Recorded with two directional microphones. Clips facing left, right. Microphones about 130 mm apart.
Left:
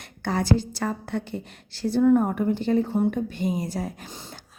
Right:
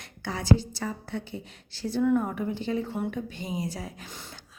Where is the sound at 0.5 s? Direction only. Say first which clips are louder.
Left 2 dB; 90° left; by 2.0 s 65° left (ahead or behind).